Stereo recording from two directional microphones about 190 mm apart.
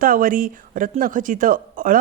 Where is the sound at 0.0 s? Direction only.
45° right (ahead or behind).